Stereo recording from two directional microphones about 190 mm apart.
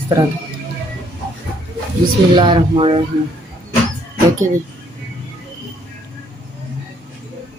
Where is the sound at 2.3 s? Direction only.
25° right (ahead or behind).